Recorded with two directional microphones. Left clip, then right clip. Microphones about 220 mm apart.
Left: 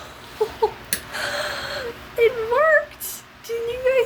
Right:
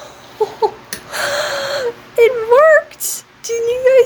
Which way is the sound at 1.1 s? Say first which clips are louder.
Right 9 dB; 55° right (ahead or behind).